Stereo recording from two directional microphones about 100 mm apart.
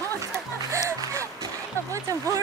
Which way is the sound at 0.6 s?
30° right (ahead or behind).